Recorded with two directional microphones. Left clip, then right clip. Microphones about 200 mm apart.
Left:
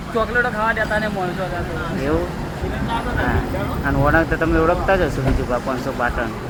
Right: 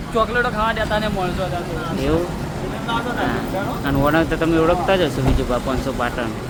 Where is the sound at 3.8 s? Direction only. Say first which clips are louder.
Left 1 dB; 15° right (ahead or behind).